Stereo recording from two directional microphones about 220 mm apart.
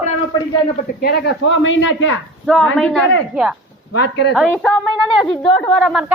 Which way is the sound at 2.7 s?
5° left (ahead or behind).